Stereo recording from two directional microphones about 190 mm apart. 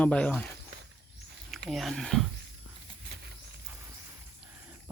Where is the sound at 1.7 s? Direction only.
Centre (ahead or behind).